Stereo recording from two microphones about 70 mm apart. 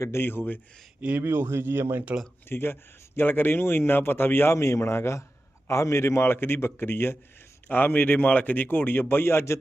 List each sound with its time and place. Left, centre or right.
0.0 s a man's voice: left
1.2 s speech: right
2.5 s a man's voice: left
4.5 s a man's voice: left